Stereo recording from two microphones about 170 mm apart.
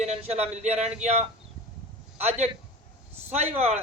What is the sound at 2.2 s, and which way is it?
Speech, 40° right (ahead or behind).